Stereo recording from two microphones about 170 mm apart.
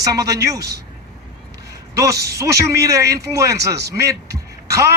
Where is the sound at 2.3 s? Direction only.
20° right (ahead or behind).